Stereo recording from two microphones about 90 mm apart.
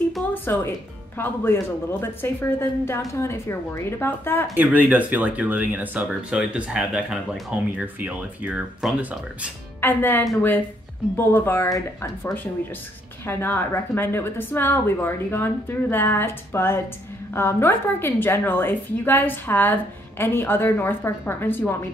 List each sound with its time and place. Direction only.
0.3 s a woman's voice: 25° left (ahead or behind)
4.6 s speech: 15° right (ahead or behind)
7.7 s speech: 20° right (ahead or behind)
9.8 s a woman's voice: 25° left (ahead or behind)
13.2 s a woman's voice: 25° left (ahead or behind)